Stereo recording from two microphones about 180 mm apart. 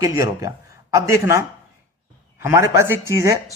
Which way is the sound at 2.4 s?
15° right (ahead or behind).